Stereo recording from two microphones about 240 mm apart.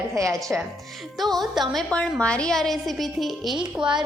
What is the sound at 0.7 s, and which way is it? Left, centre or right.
A woman's voice, centre.